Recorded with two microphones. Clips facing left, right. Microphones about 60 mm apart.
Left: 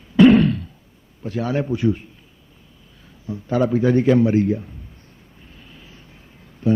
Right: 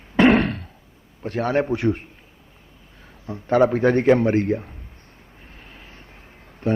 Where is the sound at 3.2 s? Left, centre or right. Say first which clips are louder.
Right 3 dB; right.